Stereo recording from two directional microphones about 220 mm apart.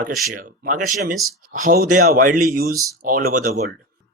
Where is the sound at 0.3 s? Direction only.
40° right (ahead or behind).